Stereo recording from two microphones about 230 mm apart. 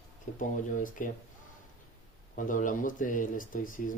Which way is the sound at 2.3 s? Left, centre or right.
Left.